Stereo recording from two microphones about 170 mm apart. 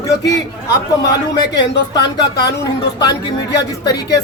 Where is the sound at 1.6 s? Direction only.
25° left (ahead or behind).